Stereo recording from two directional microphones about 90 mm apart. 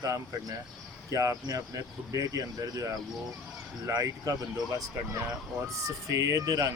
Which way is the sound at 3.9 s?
45° right (ahead or behind).